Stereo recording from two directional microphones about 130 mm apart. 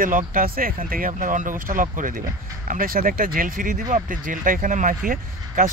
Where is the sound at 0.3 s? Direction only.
90° right.